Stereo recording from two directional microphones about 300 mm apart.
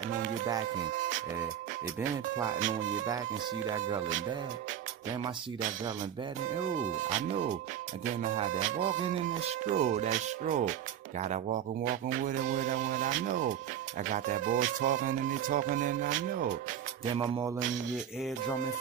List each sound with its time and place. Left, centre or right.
2.0 s speech: centre
6.8 s speech: right
17.1 s speech: centre